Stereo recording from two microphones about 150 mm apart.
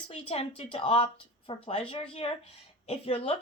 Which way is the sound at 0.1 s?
40° left (ahead or behind).